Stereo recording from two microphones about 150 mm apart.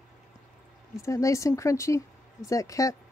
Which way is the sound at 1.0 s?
20° left (ahead or behind).